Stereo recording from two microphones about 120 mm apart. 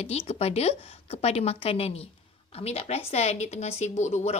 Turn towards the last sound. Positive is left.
turn(degrees=70)  # may be behind; listen again after turning